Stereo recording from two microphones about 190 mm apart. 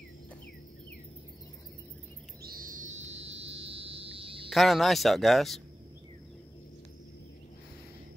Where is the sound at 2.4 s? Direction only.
50° right (ahead or behind); by 4.5 s 30° right (ahead or behind).